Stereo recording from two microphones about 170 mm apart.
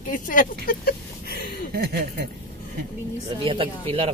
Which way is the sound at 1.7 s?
70° right (ahead or behind).